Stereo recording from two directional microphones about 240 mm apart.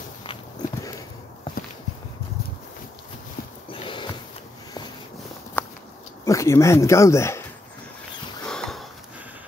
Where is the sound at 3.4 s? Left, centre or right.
Left.